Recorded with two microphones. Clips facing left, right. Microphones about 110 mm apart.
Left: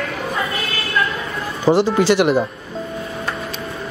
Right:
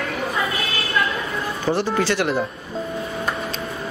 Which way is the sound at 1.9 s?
20° left (ahead or behind).